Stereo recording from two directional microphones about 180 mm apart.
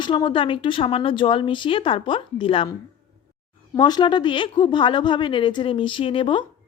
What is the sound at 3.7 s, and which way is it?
Speech, 25° left (ahead or behind).